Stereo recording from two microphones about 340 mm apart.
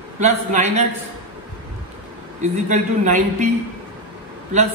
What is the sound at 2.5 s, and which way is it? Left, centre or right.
Speech, right.